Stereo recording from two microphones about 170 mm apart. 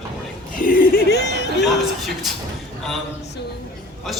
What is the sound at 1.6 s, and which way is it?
Speech, centre (ahead or behind).